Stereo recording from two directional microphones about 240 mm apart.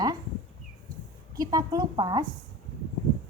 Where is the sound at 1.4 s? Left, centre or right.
Centre.